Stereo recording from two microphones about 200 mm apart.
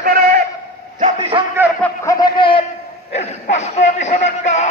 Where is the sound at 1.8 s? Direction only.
15° left (ahead or behind).